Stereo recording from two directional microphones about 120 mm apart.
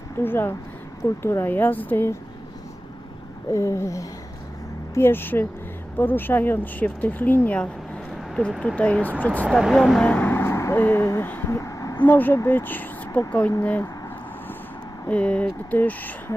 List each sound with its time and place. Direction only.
0.2 s speech: 20° left (ahead or behind)
3.5 s a sound: 25° left (ahead or behind)
4.9 s speech: 20° left (ahead or behind)
9.5 s speech: 5° right (ahead or behind); by 11.9 s 25° left (ahead or behind)
12.0 s speech: 15° left (ahead or behind)
15.1 s speech: 10° left (ahead or behind)